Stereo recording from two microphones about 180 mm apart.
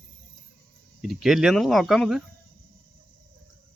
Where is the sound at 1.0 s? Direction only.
Centre (ahead or behind).